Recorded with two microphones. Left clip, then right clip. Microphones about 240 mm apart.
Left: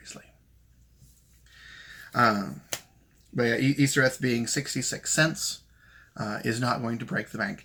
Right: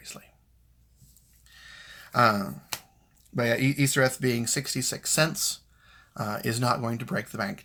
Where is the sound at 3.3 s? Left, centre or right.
Right.